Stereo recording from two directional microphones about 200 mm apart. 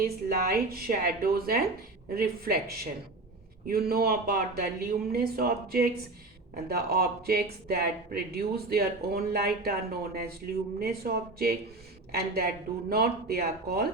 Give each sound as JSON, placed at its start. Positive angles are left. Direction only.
{"t": 0.0, "sound": "speech", "side_deg": -50}